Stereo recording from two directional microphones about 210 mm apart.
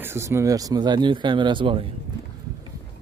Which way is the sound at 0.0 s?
10° right (ahead or behind).